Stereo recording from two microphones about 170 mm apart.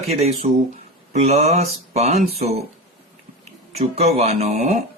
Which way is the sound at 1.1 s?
40° right (ahead or behind).